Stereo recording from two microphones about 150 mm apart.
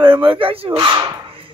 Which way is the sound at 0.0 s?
35° right (ahead or behind).